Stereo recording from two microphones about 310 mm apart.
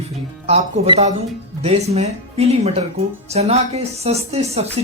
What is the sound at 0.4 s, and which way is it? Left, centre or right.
Speech, centre.